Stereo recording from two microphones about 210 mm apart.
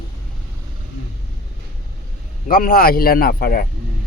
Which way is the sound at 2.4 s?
45° left (ahead or behind).